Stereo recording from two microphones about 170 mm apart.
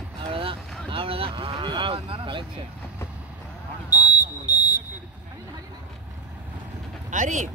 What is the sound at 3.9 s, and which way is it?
Smoke detector, 20° left (ahead or behind).